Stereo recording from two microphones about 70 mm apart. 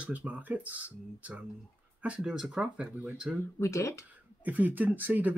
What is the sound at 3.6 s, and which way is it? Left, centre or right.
Speech, left.